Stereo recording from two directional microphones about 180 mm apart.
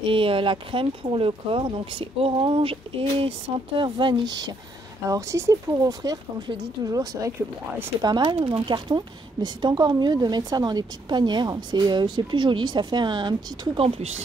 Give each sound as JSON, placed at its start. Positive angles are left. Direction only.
{"t": 0.0, "sound": "speech", "side_deg": -30}